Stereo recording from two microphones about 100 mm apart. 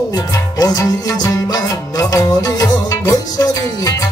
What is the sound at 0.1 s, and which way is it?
Music, 40° left (ahead or behind).